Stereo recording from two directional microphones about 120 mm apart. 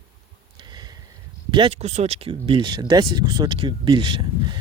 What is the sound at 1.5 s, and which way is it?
Speech, 45° right (ahead or behind).